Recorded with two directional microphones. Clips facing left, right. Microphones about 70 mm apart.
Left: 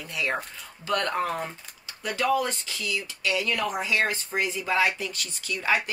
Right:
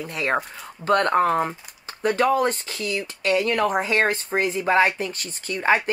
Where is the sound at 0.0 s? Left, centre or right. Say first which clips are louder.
Right 5 dB; right.